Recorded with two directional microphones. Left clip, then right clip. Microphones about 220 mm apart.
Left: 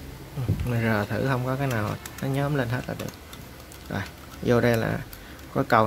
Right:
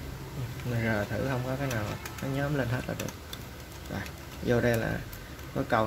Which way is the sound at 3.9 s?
20° left (ahead or behind).